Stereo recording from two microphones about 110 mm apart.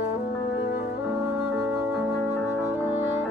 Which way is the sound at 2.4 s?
20° left (ahead or behind).